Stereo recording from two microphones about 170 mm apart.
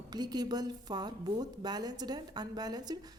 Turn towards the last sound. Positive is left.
turn(degrees=-25)  # may be behind; listen again after turning